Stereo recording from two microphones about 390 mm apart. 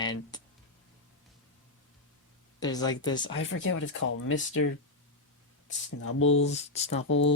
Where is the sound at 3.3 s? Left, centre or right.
Left.